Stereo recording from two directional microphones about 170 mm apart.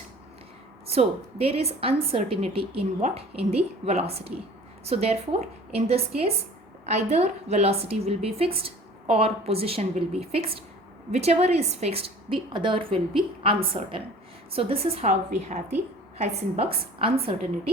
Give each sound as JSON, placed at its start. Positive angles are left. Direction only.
{"t": 0.9, "sound": "a woman's voice", "side_deg": -35}